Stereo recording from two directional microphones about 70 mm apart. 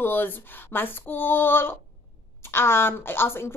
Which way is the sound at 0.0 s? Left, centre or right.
Left.